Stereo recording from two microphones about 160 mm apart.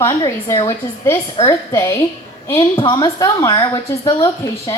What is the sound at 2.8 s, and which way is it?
Speech, 30° left (ahead or behind).